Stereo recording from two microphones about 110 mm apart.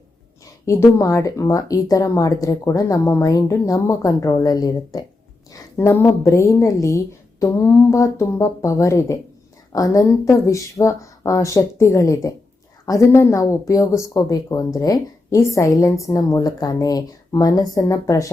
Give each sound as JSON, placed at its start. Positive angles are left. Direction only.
{"t": 0.6, "sound": "a woman's voice", "side_deg": 25}